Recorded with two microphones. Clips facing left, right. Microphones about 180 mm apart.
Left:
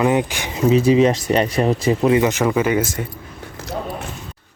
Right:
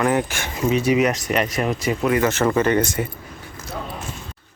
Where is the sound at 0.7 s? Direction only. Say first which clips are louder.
Left 5 dB; 30° left (ahead or behind).